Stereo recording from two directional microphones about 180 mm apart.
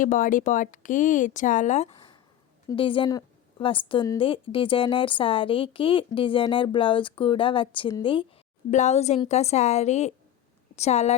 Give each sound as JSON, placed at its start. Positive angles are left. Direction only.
{"t": 0.0, "sound": "speech", "side_deg": 50}
{"t": 2.6, "sound": "a woman's voice", "side_deg": 30}
{"t": 8.7, "sound": "a woman's voice", "side_deg": 40}